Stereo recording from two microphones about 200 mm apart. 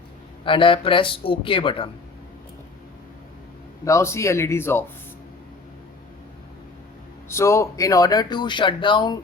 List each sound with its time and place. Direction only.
0.4 s speech: 25° left (ahead or behind)
3.8 s speech: 15° left (ahead or behind)
7.3 s speech: 15° left (ahead or behind)